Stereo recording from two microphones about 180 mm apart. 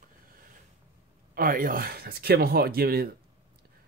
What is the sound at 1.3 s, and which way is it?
Speech, 50° right (ahead or behind).